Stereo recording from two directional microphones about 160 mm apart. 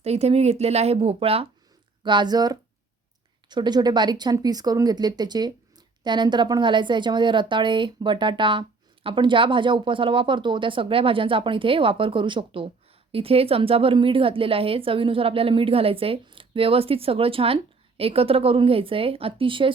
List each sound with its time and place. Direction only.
0.0 s a woman's voice: 40° right (ahead or behind)